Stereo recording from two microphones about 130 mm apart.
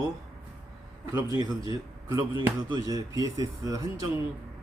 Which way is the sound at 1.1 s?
25° right (ahead or behind).